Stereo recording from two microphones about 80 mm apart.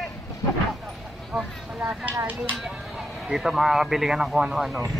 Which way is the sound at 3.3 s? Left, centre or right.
Centre.